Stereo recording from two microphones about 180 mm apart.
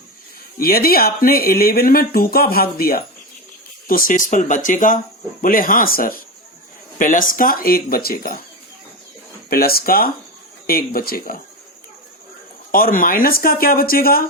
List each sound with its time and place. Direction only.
0.6 s speech: 55° left (ahead or behind)
9.5 s speech: 55° left (ahead or behind)
12.7 s speech: 50° left (ahead or behind)